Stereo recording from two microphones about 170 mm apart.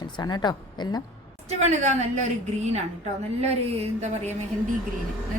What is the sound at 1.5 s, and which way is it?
Speech, 40° right (ahead or behind).